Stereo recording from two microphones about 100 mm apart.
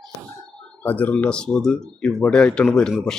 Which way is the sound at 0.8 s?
15° left (ahead or behind).